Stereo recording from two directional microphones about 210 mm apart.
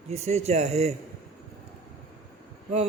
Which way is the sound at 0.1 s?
30° right (ahead or behind).